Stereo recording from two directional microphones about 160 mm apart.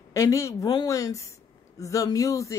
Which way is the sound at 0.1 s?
20° left (ahead or behind).